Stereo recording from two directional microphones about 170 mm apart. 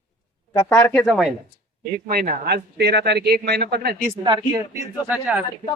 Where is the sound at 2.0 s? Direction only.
60° right (ahead or behind).